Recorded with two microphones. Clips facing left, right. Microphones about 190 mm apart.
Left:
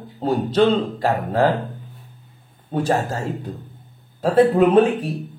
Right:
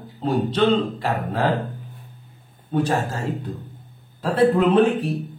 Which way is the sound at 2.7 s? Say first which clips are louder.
Left 1 dB; 40° left (ahead or behind).